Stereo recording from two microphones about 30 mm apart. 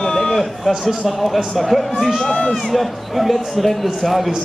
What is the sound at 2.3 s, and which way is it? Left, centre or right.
Speech, left.